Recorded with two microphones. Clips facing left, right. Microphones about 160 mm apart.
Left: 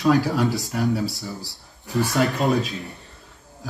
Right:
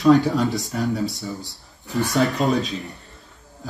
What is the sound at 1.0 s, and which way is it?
Speech, 75° left (ahead or behind).